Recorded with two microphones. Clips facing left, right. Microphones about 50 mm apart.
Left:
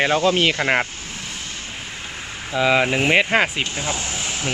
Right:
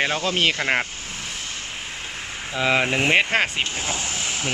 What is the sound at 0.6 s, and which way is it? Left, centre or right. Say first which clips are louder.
Speech: left 3 dB; left.